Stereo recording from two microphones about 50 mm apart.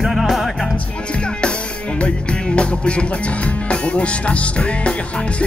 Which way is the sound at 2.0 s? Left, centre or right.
Left.